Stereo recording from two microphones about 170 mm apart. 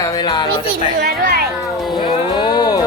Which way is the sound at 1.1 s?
65° right (ahead or behind).